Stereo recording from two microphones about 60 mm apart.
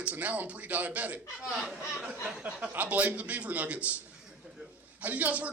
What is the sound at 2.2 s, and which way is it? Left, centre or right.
A man's voice, centre.